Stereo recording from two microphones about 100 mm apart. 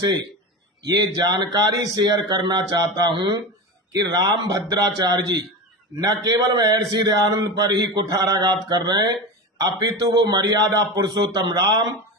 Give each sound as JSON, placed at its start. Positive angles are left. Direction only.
{"t": 0.9, "sound": "a man's voice", "side_deg": -45}
{"t": 9.6, "sound": "a man's voice", "side_deg": -35}